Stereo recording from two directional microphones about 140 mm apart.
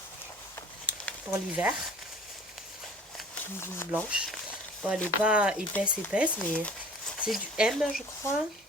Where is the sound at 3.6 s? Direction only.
15° left (ahead or behind).